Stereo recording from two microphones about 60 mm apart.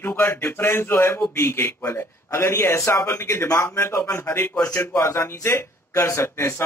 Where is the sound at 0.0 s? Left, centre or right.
Left.